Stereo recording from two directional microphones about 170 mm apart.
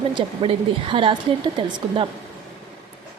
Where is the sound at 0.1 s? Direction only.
30° right (ahead or behind).